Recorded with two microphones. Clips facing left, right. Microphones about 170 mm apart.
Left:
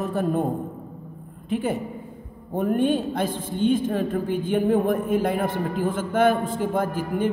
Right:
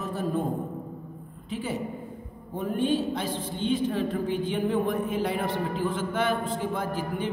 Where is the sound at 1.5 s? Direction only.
55° left (ahead or behind).